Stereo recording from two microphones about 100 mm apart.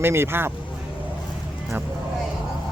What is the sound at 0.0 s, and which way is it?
Speech, 25° right (ahead or behind).